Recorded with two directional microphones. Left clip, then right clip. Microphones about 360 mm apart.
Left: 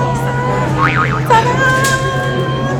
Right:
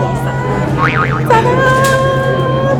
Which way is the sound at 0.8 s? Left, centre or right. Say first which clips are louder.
Right 2 dB; centre.